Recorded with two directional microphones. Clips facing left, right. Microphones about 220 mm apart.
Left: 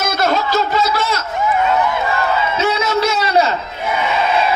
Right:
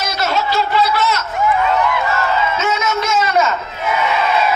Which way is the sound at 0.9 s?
30° left (ahead or behind).